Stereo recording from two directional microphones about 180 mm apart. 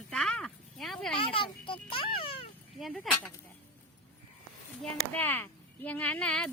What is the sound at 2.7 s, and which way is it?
Speech, centre (ahead or behind).